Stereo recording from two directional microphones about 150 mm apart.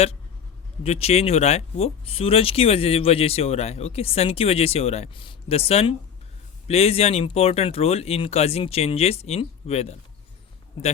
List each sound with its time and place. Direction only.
0.9 s speech: 45° left (ahead or behind)